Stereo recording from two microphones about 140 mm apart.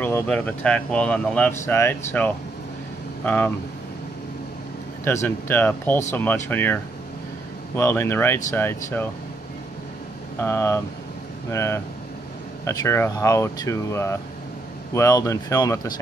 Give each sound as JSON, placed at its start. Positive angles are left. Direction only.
{"t": 0.0, "sound": "speech", "side_deg": 10}
{"t": 1.5, "sound": "speech", "side_deg": 20}
{"t": 5.0, "sound": "speech", "side_deg": 15}
{"t": 10.4, "sound": "speech", "side_deg": 20}